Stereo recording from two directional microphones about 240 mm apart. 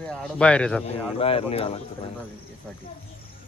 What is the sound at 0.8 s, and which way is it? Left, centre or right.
Speech, left.